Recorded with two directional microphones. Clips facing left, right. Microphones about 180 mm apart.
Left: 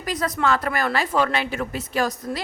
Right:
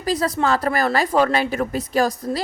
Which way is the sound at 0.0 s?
30° right (ahead or behind).